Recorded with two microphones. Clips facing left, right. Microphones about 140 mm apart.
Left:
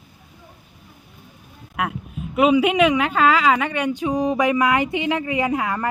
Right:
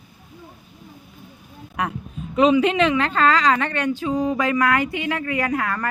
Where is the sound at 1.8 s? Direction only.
5° left (ahead or behind); by 5.9 s 20° left (ahead or behind).